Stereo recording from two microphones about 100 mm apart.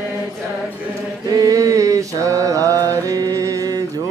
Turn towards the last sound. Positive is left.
turn(degrees=-35)  # may be behind; listen again after turning